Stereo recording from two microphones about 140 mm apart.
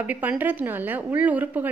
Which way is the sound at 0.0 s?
10° right (ahead or behind).